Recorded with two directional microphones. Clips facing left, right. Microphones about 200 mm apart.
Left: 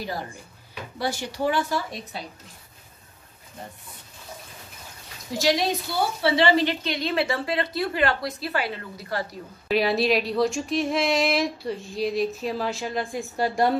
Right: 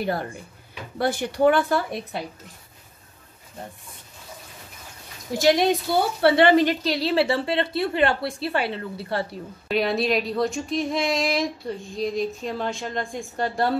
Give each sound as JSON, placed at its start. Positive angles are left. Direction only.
{"t": 0.0, "sound": "speech", "side_deg": -55}
{"t": 5.3, "sound": "a woman's voice", "side_deg": -55}
{"t": 9.7, "sound": "speech", "side_deg": 0}